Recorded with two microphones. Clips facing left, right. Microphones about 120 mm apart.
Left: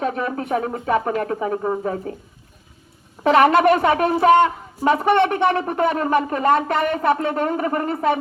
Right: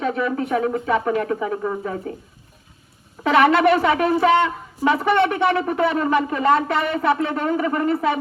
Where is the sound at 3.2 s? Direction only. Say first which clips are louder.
Left 1 dB; 40° left (ahead or behind).